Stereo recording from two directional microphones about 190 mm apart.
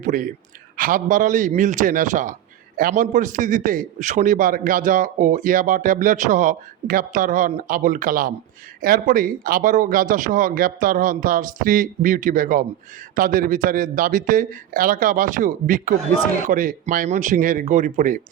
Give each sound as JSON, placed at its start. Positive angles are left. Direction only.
{"t": 0.0, "sound": "a man's voice", "side_deg": -40}